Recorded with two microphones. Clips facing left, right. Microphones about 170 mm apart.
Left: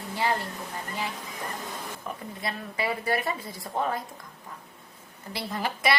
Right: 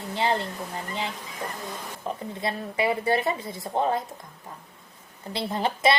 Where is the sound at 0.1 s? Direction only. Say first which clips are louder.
Right 2 dB; 25° right (ahead or behind).